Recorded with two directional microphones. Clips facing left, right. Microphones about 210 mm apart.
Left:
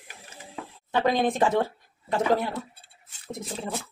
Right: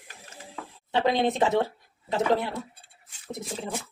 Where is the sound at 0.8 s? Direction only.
25° right (ahead or behind).